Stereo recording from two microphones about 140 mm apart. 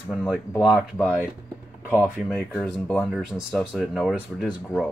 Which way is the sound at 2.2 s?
Centre (ahead or behind).